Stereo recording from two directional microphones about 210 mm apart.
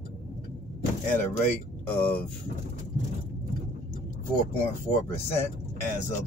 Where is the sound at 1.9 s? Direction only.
5° left (ahead or behind).